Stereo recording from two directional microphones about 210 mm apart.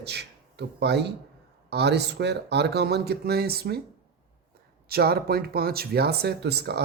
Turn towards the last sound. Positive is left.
turn(degrees=-50)  # may be behind; listen again after turning